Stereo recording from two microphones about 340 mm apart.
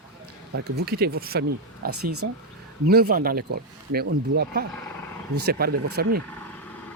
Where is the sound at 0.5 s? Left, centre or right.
Right.